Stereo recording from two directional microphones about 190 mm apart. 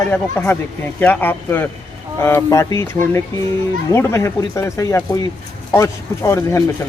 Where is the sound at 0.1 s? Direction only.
10° left (ahead or behind).